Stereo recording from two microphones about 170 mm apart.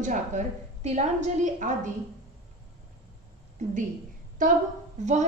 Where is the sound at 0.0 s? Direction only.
50° right (ahead or behind).